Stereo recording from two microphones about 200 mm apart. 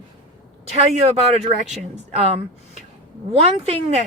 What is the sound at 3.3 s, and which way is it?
Speech, 30° right (ahead or behind).